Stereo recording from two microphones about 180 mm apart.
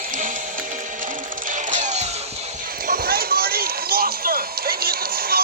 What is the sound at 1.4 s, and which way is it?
Music, 45° right (ahead or behind).